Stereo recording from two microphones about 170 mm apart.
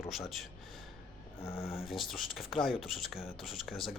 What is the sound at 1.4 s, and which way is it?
Speech, 15° left (ahead or behind).